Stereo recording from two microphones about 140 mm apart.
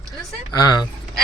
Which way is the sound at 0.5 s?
30° left (ahead or behind).